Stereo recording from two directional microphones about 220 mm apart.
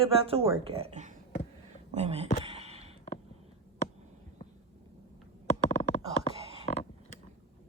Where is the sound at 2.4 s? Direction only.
30° right (ahead or behind).